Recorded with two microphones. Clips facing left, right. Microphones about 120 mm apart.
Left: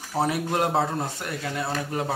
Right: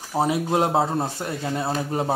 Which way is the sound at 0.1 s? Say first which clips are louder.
Right 3 dB; 20° right (ahead or behind).